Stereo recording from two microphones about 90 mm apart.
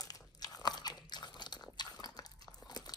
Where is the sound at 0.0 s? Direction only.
45° left (ahead or behind).